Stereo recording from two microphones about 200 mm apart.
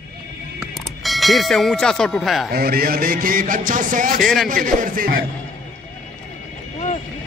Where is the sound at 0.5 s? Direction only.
Centre (ahead or behind).